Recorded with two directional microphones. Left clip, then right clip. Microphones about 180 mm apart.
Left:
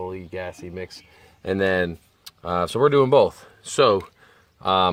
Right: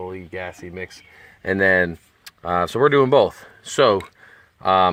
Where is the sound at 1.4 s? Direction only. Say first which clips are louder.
Right 4 dB; 20° right (ahead or behind).